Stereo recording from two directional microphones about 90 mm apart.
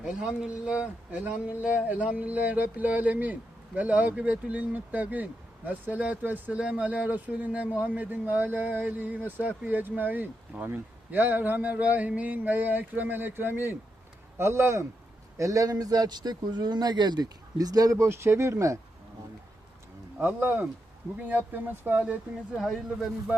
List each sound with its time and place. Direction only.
0.0 s speech: 10° right (ahead or behind); by 18.8 s 35° right (ahead or behind)
20.1 s speech: 20° right (ahead or behind)
22.5 s speech: centre (ahead or behind)